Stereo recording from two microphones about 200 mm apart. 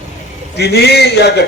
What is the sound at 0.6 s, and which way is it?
Speech, 55° left (ahead or behind).